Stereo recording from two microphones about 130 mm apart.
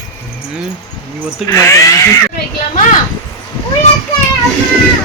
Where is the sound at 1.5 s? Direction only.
20° left (ahead or behind).